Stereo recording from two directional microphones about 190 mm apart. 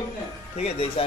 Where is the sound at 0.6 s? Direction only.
35° left (ahead or behind).